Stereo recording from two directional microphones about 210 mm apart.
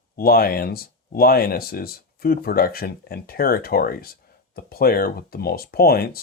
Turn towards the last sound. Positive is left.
turn(degrees=45)  # may be behind; listen again after turning